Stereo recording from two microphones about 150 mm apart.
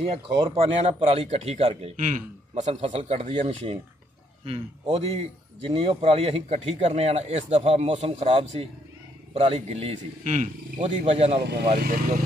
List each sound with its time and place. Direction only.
0.1 s speech: 40° right (ahead or behind)
2.0 s a man's voice: 55° right (ahead or behind); by 11.4 s 40° right (ahead or behind)
11.4 s speech: 90° right
11.8 s speech: 70° right (ahead or behind)